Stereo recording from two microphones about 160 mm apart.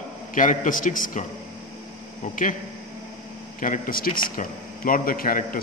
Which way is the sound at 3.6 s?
60° left (ahead or behind).